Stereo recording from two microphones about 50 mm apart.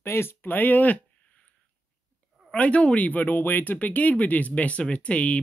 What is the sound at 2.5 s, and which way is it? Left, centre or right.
Speech, left.